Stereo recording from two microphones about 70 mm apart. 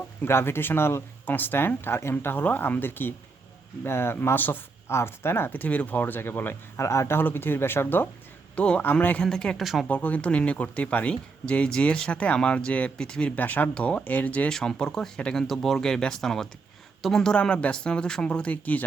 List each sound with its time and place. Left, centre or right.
0.2 s speech: left
6.7 s speech: left
7.2 s speech: left
8.5 s speech: centre
9.2 s speech: centre
9.8 s speech: left
14.5 s speech: centre